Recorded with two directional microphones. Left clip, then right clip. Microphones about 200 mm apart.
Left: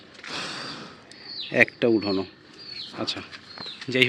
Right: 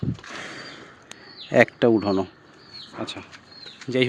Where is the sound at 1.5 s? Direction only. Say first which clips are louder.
Right 3 dB; 25° right (ahead or behind).